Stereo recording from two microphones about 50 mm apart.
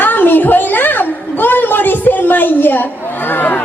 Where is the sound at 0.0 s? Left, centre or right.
Left.